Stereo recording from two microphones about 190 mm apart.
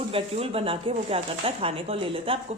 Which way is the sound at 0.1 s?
30° right (ahead or behind).